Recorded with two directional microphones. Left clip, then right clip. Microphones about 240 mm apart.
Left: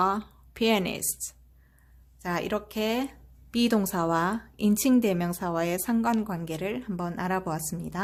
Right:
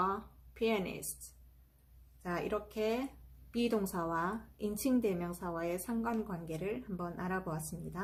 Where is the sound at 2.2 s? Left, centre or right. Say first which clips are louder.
Left 7 dB; left.